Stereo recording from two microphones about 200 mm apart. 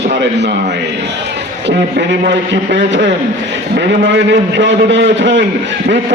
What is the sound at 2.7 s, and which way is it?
A man's voice, 60° right (ahead or behind).